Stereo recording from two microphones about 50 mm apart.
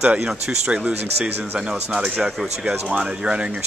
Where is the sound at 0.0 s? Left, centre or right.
Centre.